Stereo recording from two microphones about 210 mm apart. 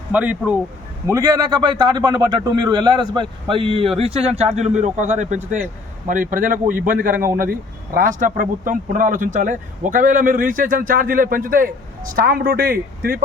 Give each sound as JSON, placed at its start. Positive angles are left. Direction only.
{"t": 0.1, "sound": "a man's voice", "side_deg": -5}